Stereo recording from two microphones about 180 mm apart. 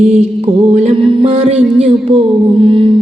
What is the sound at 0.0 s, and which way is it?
Mantra, 45° right (ahead or behind).